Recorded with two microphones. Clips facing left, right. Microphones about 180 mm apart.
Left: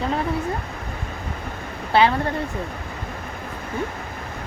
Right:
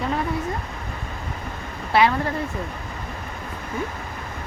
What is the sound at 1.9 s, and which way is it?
Speech, 30° left (ahead or behind).